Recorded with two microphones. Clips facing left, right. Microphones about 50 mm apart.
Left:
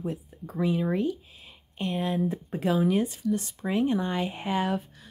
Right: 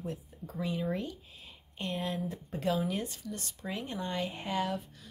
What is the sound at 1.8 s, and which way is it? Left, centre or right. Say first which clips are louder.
Speech: left 7 dB; centre.